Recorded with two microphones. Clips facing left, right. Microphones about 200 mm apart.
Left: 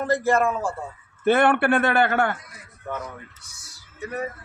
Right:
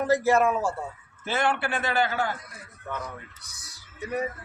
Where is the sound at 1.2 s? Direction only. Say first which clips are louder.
Left 8 dB; 60° left (ahead or behind).